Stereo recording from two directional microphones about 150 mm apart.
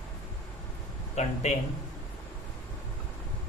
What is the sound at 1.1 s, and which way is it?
Speech, 50° left (ahead or behind).